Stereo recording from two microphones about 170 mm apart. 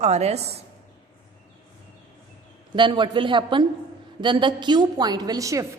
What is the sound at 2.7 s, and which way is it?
A woman's voice, 25° right (ahead or behind).